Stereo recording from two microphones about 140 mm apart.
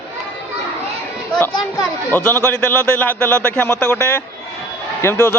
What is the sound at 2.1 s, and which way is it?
A man's voice, 15° left (ahead or behind).